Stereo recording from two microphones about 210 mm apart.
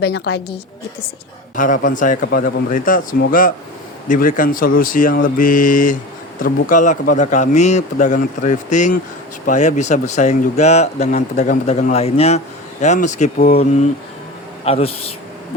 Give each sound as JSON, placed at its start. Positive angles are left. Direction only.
{"t": 0.0, "sound": "a woman's voice", "side_deg": 50}
{"t": 1.5, "sound": "a man's voice", "side_deg": 40}